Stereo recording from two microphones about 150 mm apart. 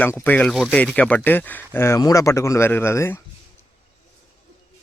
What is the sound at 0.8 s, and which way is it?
Speech, 10° left (ahead or behind).